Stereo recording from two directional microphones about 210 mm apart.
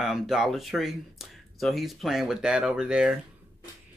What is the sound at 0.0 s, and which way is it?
Speech, centre (ahead or behind).